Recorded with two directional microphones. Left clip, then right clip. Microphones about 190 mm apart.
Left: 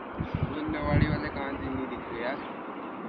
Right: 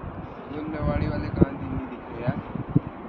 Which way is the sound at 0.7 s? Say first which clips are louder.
Even; 65° right (ahead or behind).